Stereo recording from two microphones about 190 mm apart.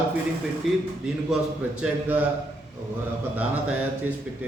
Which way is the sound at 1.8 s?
5° right (ahead or behind).